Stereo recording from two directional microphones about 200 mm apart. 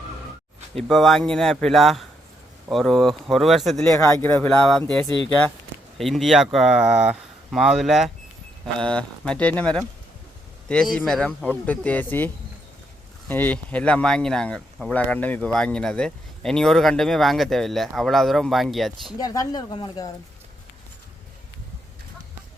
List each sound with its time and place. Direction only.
0.8 s speech: centre (ahead or behind)
10.9 s speech: 5° left (ahead or behind)
19.2 s speech: 20° left (ahead or behind)